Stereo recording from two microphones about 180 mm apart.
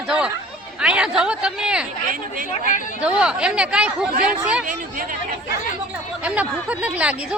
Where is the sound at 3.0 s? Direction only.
5° right (ahead or behind).